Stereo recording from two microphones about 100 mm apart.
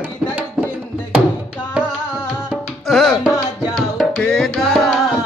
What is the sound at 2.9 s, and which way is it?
Tabla, 5° left (ahead or behind).